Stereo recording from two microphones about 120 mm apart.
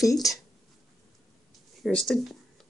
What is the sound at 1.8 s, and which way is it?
Speech, 5° left (ahead or behind).